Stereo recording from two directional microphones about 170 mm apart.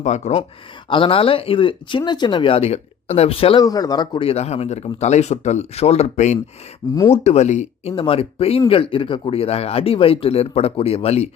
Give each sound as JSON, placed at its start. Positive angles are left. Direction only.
{"t": 0.0, "sound": "speech", "side_deg": 45}
{"t": 0.9, "sound": "speech", "side_deg": 30}
{"t": 3.6, "sound": "speech", "side_deg": 20}